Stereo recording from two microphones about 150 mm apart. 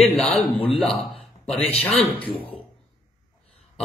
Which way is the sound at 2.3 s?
40° left (ahead or behind).